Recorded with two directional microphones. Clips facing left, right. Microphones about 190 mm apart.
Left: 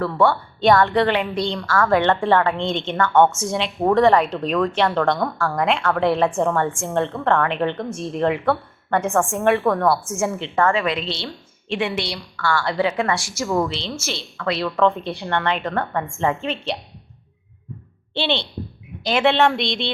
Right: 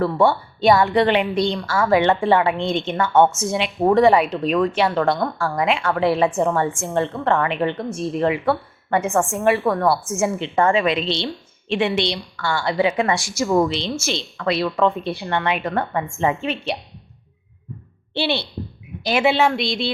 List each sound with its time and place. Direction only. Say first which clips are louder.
0.0 s a woman's voice: right 1 dB; 15° right (ahead or behind)
10.2 s a woman's voice: right 1 dB; 15° right (ahead or behind)
18.1 s a woman's voice: right 1 dB; 10° right (ahead or behind)